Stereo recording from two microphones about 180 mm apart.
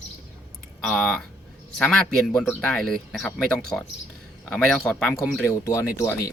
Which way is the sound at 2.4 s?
Centre (ahead or behind).